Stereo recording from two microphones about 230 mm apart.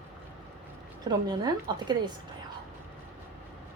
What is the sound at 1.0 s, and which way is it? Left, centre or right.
Speech, centre.